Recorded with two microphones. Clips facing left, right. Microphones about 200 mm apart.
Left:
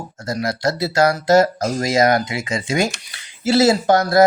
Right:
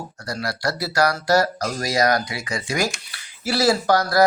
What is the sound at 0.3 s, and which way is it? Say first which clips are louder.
Speech: left 5 dB; 20° left (ahead or behind).